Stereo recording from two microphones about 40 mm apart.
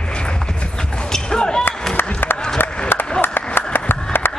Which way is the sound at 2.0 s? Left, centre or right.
Left.